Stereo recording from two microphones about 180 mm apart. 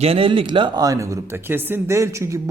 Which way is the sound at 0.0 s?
30° right (ahead or behind).